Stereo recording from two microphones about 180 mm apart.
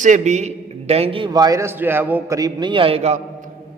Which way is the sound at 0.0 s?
40° right (ahead or behind).